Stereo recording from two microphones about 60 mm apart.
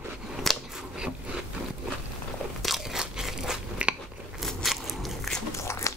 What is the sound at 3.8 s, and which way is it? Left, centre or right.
Biting, centre.